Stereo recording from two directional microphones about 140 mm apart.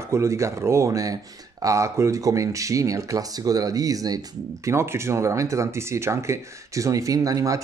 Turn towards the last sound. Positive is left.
turn(degrees=-25)  # may be behind; listen again after turning